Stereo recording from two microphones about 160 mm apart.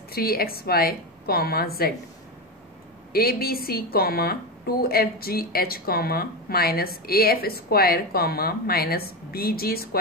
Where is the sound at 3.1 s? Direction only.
70° left (ahead or behind).